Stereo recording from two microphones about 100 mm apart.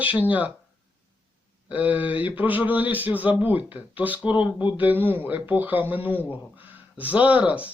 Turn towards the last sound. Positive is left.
turn(degrees=-15)  # may be behind; listen again after turning